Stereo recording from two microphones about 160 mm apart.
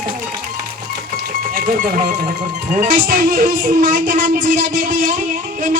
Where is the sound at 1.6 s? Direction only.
60° right (ahead or behind).